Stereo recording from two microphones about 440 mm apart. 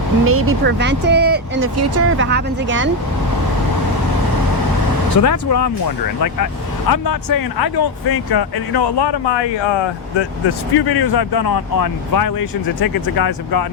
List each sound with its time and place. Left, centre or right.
0.3 s speech: right
5.1 s speech: left
10.8 s speech: left